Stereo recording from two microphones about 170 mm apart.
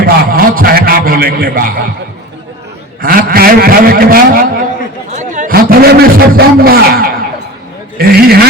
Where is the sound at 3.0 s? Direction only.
60° right (ahead or behind).